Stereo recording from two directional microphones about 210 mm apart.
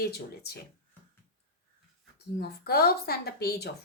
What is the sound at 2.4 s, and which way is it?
Speech, 50° left (ahead or behind).